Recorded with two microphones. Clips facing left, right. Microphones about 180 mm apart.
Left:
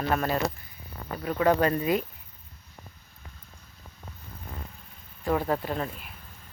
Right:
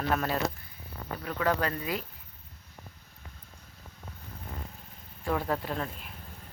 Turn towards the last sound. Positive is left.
turn(degrees=5)  # may be behind; listen again after turning